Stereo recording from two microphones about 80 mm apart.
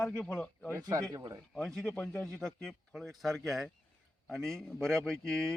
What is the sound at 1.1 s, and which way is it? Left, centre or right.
Speech, right.